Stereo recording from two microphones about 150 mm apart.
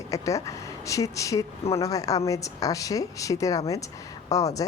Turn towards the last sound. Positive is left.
turn(degrees=20)  # may be behind; listen again after turning